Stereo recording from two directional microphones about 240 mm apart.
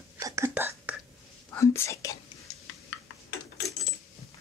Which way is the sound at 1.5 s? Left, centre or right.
Centre.